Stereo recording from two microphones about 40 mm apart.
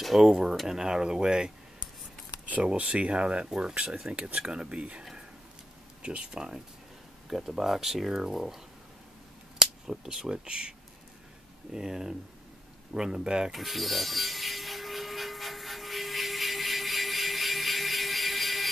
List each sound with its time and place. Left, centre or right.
0.2 s speech: centre
2.8 s speech: right
6.0 s speech: right
9.6 s speech: centre
11.7 s speech: centre
13.5 s rub: centre